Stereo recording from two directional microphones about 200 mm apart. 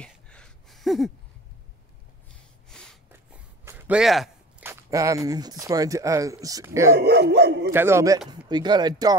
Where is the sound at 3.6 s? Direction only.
10° right (ahead or behind).